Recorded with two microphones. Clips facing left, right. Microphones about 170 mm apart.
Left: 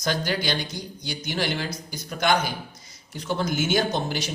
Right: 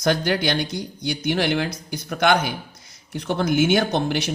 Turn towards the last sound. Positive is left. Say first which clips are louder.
# right 4 dB
turn(degrees=-60)  # may be behind; listen again after turning